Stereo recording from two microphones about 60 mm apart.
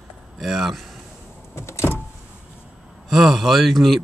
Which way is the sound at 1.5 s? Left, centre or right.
Left.